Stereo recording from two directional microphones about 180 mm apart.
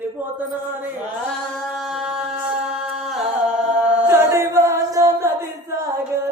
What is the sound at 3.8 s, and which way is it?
Chant, 15° right (ahead or behind).